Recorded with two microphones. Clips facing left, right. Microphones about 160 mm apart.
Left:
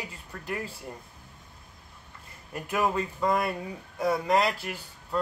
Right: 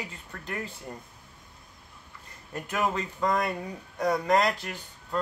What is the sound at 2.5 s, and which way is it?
Speech, 10° left (ahead or behind).